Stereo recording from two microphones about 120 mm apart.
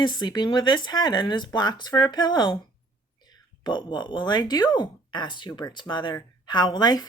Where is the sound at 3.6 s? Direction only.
40° left (ahead or behind).